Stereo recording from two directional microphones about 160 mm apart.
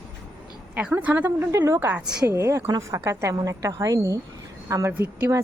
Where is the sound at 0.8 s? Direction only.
10° right (ahead or behind).